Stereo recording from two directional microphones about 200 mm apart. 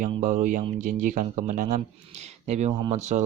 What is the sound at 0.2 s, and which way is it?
Speech, 40° right (ahead or behind).